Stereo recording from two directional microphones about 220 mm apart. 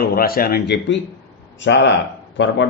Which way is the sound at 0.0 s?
45° left (ahead or behind).